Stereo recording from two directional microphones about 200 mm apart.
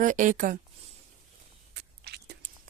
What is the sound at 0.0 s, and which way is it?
Speech, 40° right (ahead or behind).